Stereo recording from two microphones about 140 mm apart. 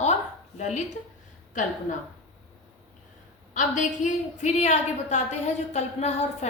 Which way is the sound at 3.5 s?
60° left (ahead or behind).